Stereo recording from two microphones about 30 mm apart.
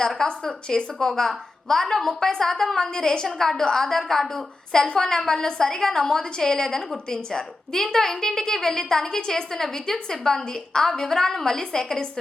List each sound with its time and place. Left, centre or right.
0.3 s a woman's voice: left